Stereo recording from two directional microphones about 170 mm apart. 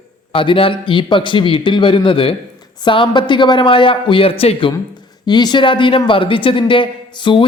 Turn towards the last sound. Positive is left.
turn(degrees=30)  # may be behind; listen again after turning